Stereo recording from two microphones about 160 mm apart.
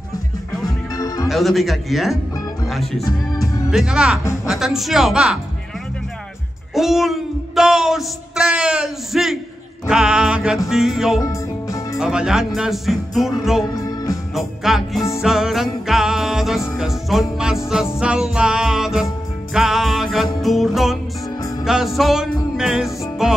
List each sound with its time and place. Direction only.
0.7 s music: 25° left (ahead or behind)
1.3 s speech: centre (ahead or behind)
3.1 s music: 25° left (ahead or behind)
3.7 s speech: 5° right (ahead or behind)
6.7 s a sound: centre (ahead or behind)
9.8 s speech: 5° right (ahead or behind)
13.7 s music: 25° left (ahead or behind)
14.3 s music: centre (ahead or behind)